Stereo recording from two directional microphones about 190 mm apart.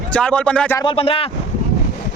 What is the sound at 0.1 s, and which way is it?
Speech, 5° left (ahead or behind).